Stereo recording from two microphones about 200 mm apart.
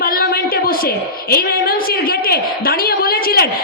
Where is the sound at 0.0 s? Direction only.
50° left (ahead or behind).